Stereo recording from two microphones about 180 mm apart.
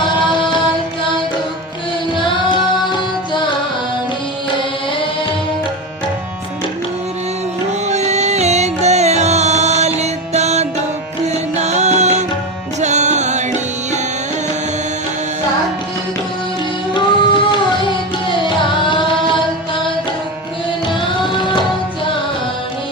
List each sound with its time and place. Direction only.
7.9 s music: 40° right (ahead or behind)
16.9 s music: 25° left (ahead or behind)
21.2 s music: 25° left (ahead or behind)